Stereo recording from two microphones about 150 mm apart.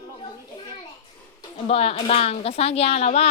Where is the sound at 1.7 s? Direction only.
40° left (ahead or behind).